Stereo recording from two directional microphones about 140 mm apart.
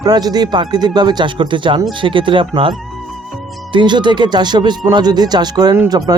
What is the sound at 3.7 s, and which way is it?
Speech, 35° right (ahead or behind).